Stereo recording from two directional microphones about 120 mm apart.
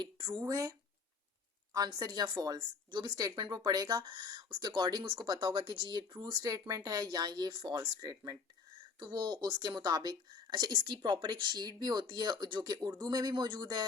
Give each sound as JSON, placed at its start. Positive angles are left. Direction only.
{"t": 0.0, "sound": "speech", "side_deg": -40}
{"t": 0.4, "sound": "speech", "side_deg": -30}